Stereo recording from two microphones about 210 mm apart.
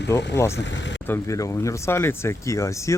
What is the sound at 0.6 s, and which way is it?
Speech, 60° left (ahead or behind).